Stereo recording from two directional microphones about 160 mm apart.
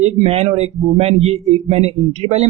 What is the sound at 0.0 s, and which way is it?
Speech, 45° right (ahead or behind).